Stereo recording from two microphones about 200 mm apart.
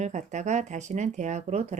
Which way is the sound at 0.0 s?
35° right (ahead or behind).